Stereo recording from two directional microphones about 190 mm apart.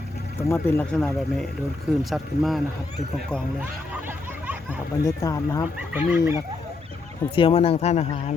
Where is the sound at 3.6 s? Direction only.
10° right (ahead or behind).